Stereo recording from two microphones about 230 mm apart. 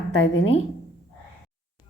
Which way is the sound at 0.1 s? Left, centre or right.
Left.